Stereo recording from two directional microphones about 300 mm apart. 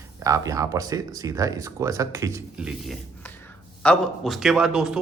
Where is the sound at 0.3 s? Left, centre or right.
Centre.